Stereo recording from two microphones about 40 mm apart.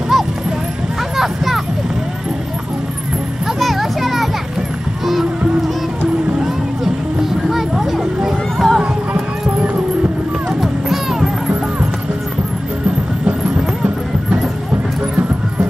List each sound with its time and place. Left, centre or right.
0.1 s clip-clop: centre
1.1 s a sound: centre
3.5 s music: centre
6.8 s music: centre
10.6 s music: centre